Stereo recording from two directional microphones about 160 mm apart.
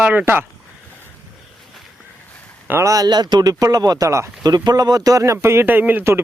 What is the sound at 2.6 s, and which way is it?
A man's voice, 15° right (ahead or behind).